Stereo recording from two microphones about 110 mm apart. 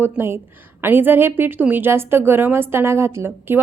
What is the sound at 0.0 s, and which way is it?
A woman's voice, 20° right (ahead or behind).